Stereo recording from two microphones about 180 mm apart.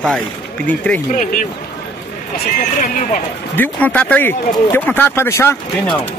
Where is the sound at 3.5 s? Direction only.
10° left (ahead or behind).